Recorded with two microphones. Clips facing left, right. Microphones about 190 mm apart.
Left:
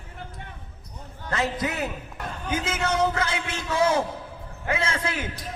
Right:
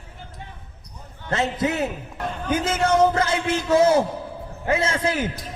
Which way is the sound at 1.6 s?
25° right (ahead or behind).